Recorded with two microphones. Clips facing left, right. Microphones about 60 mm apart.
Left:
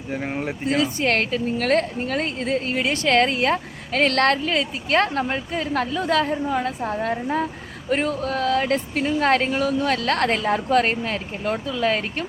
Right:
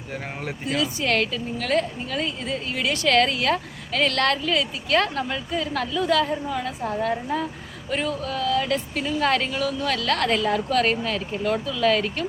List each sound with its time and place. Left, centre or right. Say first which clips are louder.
0.1 s speech: left 5 dB; left
0.6 s speech: left 3 dB; left
2.7 s speech: even; left